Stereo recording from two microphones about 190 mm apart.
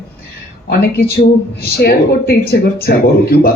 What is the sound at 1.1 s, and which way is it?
A woman's voice, 55° left (ahead or behind).